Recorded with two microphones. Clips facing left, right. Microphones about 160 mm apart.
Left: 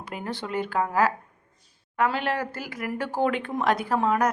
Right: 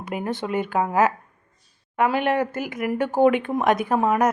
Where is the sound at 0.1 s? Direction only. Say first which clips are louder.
Right 5 dB; 20° right (ahead or behind).